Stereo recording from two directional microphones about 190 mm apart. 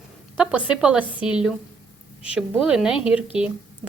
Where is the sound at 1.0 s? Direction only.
25° left (ahead or behind).